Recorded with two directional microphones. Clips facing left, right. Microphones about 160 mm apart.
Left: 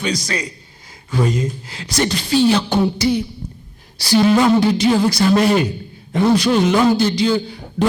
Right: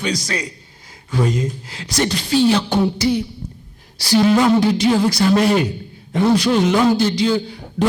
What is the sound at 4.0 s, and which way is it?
A woman's voice, 25° left (ahead or behind).